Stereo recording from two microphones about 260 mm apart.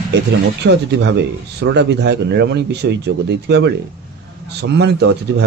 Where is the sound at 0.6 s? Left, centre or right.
Right.